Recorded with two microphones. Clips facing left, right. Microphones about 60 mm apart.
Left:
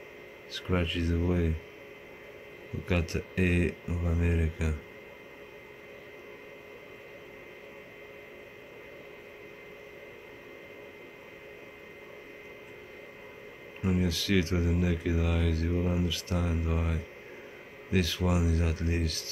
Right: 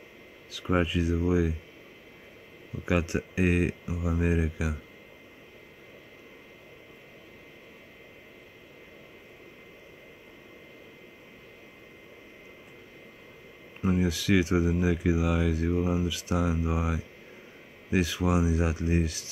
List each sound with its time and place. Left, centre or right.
0.6 s speech: centre
2.8 s speech: centre
13.7 s a sound: centre
14.0 s speech: centre